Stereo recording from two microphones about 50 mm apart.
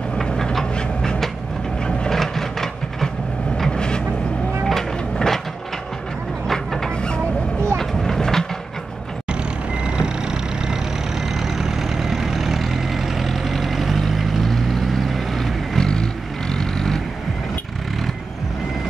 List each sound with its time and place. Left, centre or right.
0.2 s vehicle: centre
1.9 s a sound: centre
3.5 s vehicle: centre
6.4 s vehicle: centre
7.7 s a sound: centre
9.8 s vehicle: centre
15.8 s vehicle: centre